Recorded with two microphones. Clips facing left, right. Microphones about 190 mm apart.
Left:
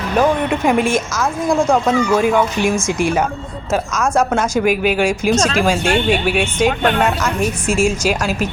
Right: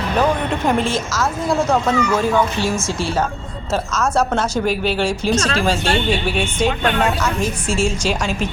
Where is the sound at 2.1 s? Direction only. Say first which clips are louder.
Left 3 dB; 10° left (ahead or behind).